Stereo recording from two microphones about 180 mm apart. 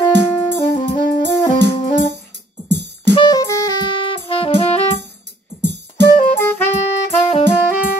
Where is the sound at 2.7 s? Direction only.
70° right (ahead or behind).